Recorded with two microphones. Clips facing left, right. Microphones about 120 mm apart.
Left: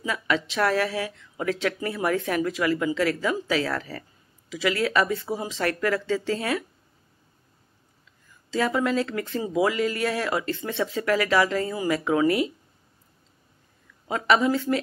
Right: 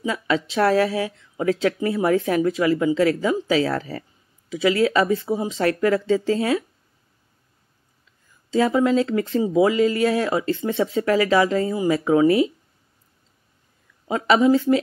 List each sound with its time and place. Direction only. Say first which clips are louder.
0.0 s speech: right 3 dB; 25° right (ahead or behind)
8.5 s speech: right 6 dB; 25° right (ahead or behind)
14.0 s speech: right 4 dB; 25° right (ahead or behind)